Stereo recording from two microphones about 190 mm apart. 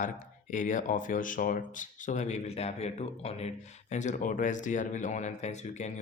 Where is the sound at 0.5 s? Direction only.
40° left (ahead or behind).